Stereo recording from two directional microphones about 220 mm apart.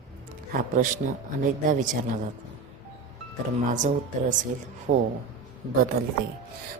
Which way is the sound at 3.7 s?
35° right (ahead or behind).